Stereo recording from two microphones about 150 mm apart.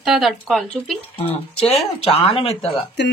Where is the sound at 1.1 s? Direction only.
45° left (ahead or behind).